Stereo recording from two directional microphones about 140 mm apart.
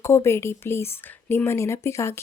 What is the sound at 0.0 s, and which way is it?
Speech, 20° left (ahead or behind).